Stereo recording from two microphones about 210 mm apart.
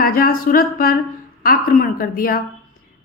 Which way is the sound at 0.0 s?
45° left (ahead or behind).